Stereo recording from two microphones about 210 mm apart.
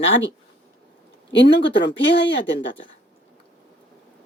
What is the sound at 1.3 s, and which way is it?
Speech, 55° left (ahead or behind).